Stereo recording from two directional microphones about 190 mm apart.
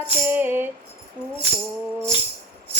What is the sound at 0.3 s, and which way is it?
Music, 10° right (ahead or behind).